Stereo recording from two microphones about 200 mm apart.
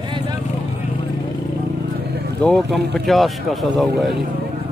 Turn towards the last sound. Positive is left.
turn(degrees=0)  # may be behind; listen again after turning